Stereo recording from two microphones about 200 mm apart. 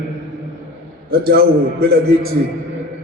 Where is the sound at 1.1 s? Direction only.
50° right (ahead or behind).